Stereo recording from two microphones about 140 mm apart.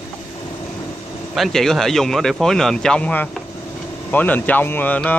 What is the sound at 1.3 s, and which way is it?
Speech, centre (ahead or behind).